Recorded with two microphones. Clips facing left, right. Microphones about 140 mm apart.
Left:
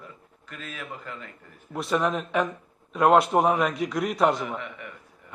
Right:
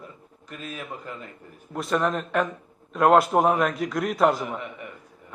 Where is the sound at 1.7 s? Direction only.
Centre (ahead or behind).